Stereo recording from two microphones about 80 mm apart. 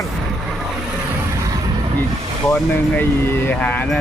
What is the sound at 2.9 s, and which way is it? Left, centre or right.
Speech, left.